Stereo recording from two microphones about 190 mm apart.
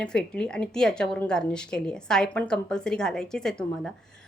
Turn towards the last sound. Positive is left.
turn(degrees=5)  # may be behind; listen again after turning